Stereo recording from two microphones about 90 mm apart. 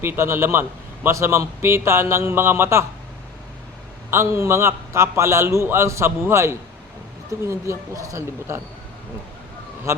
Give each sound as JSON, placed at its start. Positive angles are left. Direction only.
{"t": 0.0, "sound": "a man's voice", "side_deg": -30}
{"t": 4.1, "sound": "a man's voice", "side_deg": -30}